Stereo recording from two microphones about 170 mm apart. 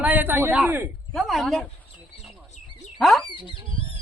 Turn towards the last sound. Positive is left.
turn(degrees=30)  # may be behind; listen again after turning